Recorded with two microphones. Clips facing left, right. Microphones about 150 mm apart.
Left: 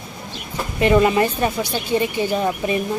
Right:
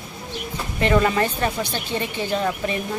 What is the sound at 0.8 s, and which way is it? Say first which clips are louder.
Speech: left 4 dB; 20° left (ahead or behind).